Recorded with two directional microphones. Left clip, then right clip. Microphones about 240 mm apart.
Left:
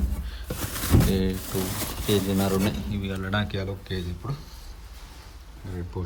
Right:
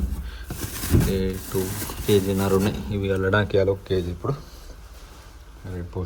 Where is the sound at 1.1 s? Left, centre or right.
Centre.